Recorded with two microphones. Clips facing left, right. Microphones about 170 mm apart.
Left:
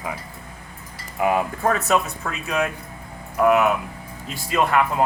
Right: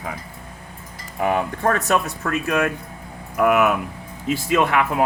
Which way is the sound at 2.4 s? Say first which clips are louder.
Right 1 dB; 75° right (ahead or behind).